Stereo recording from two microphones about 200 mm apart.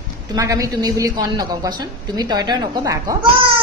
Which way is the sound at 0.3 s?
15° right (ahead or behind).